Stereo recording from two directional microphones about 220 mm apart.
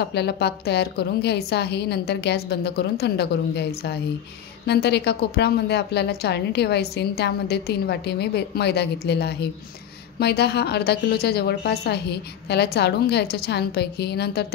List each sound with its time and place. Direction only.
0.0 s a woman's voice: 50° left (ahead or behind)